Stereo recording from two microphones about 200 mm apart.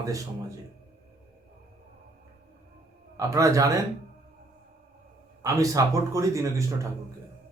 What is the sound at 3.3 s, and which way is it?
Speech, 15° right (ahead or behind).